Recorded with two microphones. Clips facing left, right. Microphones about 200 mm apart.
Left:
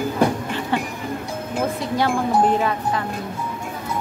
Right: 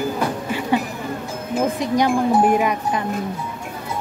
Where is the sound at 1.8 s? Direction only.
15° right (ahead or behind).